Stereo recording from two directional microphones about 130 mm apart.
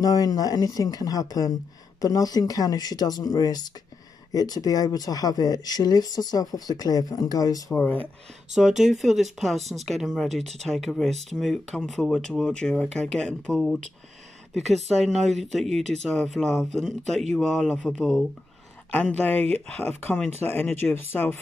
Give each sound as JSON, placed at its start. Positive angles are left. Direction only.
{"t": 0.0, "sound": "speech", "side_deg": 30}
{"t": 7.7, "sound": "speech", "side_deg": 15}
{"t": 8.5, "sound": "speech", "side_deg": -5}
{"t": 14.9, "sound": "speech", "side_deg": 0}